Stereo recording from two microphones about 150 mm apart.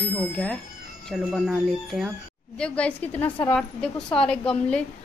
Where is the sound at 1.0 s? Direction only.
Centre (ahead or behind).